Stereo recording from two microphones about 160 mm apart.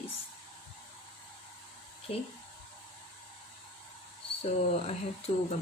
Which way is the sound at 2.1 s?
40° left (ahead or behind).